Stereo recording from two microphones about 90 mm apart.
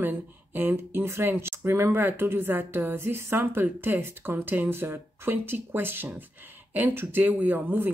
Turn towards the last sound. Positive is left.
turn(degrees=-20)  # may be behind; listen again after turning